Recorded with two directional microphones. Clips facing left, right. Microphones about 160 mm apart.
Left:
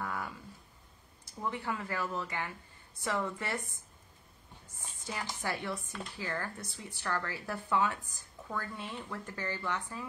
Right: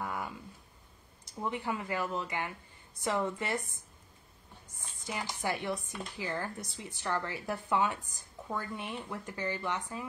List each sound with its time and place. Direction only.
0.0 s a sound: 20° right (ahead or behind)
1.2 s a woman's voice: 20° right (ahead or behind)
5.0 s speech: 15° right (ahead or behind)